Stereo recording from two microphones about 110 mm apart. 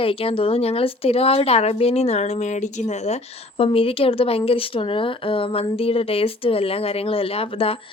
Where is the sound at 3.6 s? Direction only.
60° left (ahead or behind).